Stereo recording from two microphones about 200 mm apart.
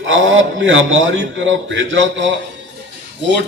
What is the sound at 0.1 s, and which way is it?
A man's voice, 70° right (ahead or behind).